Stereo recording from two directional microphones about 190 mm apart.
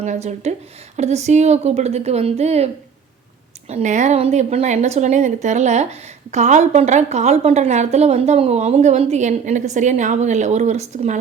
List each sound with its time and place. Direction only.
0.0 s speech: 40° right (ahead or behind)
3.7 s speech: 35° right (ahead or behind)